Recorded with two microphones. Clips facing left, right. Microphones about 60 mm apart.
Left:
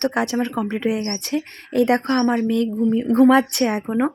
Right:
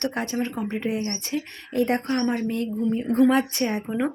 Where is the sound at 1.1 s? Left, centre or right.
Left.